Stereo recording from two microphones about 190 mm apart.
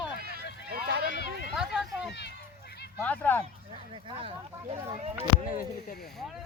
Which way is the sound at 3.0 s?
10° left (ahead or behind).